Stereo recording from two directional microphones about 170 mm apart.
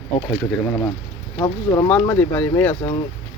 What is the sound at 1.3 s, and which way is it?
Speech, 25° left (ahead or behind).